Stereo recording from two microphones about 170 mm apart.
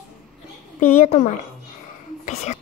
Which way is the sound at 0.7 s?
45° left (ahead or behind).